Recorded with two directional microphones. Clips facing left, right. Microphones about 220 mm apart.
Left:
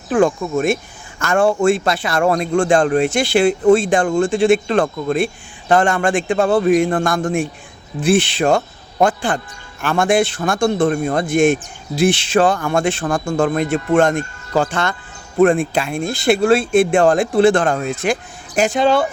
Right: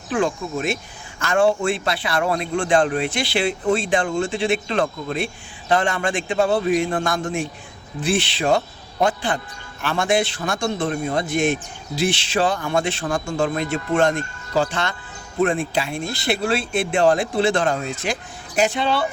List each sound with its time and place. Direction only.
0.1 s a man's voice: 50° left (ahead or behind)